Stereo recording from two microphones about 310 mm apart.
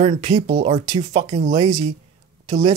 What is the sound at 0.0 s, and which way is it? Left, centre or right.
Speech, right.